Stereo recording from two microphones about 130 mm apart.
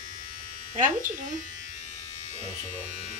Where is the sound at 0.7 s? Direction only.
80° right.